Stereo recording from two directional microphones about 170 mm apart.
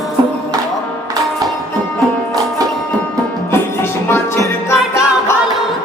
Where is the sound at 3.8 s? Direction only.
15° left (ahead or behind).